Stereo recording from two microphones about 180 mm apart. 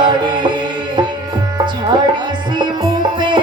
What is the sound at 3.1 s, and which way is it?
Music, 25° right (ahead or behind).